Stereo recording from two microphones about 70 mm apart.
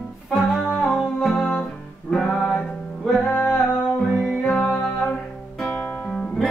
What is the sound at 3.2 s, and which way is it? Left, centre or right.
Music, centre.